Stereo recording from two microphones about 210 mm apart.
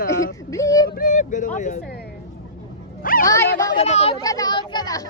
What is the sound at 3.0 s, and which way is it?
Speech, 40° left (ahead or behind).